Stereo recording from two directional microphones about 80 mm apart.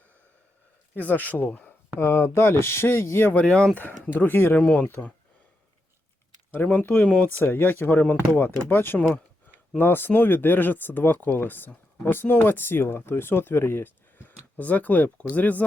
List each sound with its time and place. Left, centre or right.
0.9 s speech: left
3.3 s speech: centre
4.0 s speech: left
6.7 s speech: left